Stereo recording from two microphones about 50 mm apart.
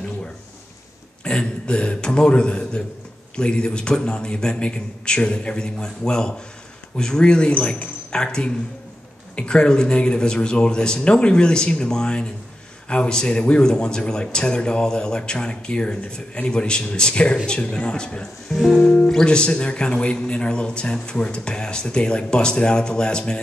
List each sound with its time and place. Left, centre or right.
1.2 s a man's voice: centre
7.5 s speech: left
8.1 s speech: centre